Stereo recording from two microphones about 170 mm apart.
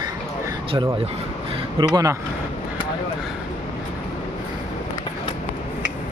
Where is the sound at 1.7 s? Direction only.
25° right (ahead or behind).